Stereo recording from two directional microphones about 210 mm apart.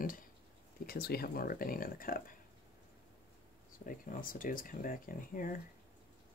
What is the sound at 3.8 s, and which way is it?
Speech, 40° left (ahead or behind).